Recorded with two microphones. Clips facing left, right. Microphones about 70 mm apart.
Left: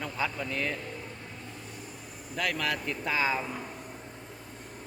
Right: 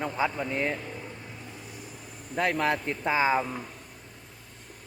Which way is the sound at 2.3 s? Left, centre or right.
Right.